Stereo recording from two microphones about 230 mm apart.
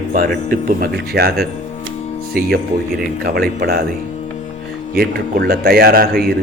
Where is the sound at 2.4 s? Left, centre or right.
Right.